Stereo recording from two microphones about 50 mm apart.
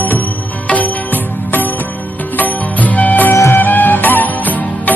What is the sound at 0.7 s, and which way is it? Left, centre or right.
Music, left.